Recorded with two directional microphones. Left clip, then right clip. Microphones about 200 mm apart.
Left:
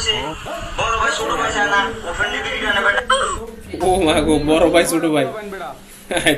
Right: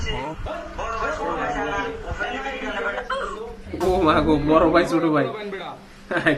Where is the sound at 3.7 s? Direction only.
Centre (ahead or behind).